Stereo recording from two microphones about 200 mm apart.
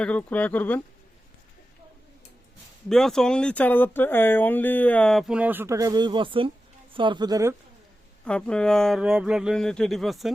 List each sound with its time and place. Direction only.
0.0 s speech: 5° left (ahead or behind)
2.9 s speech: centre (ahead or behind); by 7.5 s 20° right (ahead or behind)
8.2 s speech: 5° left (ahead or behind)